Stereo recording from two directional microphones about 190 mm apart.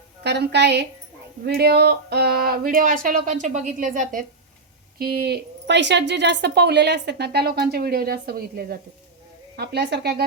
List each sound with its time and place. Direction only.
0.2 s speech: 60° right (ahead or behind); by 4.3 s 45° right (ahead or behind)
4.9 s speech: 55° right (ahead or behind)